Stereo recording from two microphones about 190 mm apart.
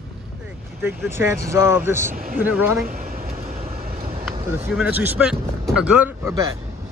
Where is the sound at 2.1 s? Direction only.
50° right (ahead or behind).